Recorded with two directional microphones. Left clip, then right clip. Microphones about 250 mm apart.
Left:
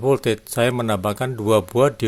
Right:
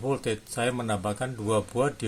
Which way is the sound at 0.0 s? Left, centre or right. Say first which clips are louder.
Left 10 dB; left.